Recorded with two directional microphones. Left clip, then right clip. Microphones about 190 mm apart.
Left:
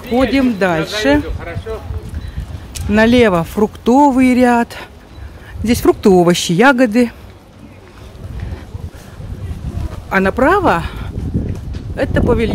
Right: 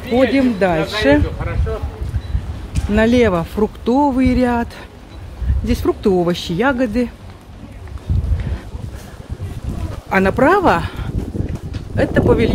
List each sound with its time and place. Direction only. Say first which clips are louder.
0.2 s speech: even; 25° left (ahead or behind)
2.9 s speech: left 3 dB; 30° left (ahead or behind)
10.0 s speech: left 1 dB; 15° left (ahead or behind)